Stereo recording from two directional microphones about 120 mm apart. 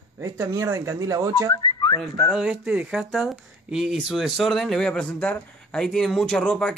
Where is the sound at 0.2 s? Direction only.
25° right (ahead or behind).